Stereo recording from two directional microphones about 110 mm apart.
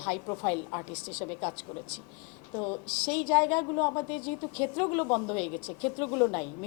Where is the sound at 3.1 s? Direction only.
10° left (ahead or behind).